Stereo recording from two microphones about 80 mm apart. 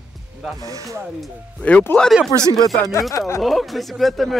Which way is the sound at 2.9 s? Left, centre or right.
Left.